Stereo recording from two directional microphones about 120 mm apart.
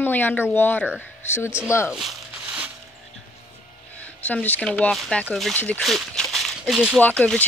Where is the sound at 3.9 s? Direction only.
10° left (ahead or behind).